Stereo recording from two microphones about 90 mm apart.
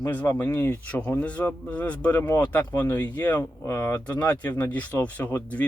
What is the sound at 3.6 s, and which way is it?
Speech, 30° left (ahead or behind).